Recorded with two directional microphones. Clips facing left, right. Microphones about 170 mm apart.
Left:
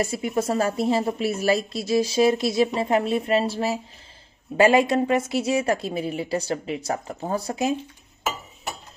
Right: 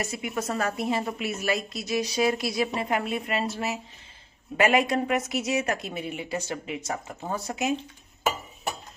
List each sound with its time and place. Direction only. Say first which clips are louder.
0.0 s a woman's voice: left 6 dB; 30° left (ahead or behind)